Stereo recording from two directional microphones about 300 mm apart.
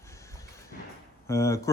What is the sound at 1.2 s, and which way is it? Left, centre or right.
Speech, centre.